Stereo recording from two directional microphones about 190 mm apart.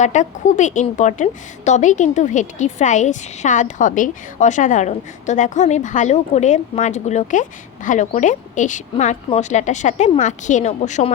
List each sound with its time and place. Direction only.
0.0 s a woman's voice: 40° left (ahead or behind)